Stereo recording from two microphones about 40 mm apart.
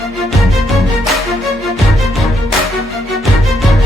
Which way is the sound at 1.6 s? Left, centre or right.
Centre.